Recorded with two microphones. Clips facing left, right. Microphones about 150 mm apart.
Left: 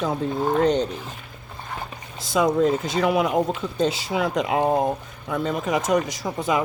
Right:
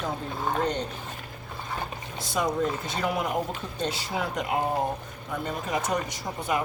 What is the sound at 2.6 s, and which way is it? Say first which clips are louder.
Speech: left 8 dB; 90° left.